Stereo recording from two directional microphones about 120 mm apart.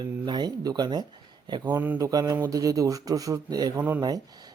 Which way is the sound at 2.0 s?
30° right (ahead or behind).